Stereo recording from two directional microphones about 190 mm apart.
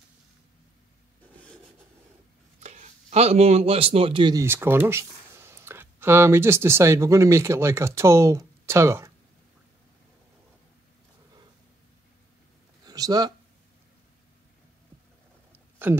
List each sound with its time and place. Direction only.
2.6 s a man's voice: 35° right (ahead or behind); by 9.1 s 15° right (ahead or behind)
12.8 s a sound: 20° right (ahead or behind)
15.8 s speech: 10° right (ahead or behind)